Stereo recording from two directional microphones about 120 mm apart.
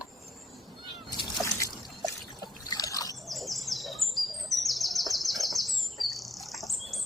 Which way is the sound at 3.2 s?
Centre (ahead or behind).